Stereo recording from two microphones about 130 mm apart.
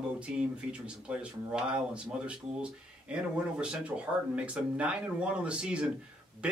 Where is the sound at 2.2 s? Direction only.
10° right (ahead or behind).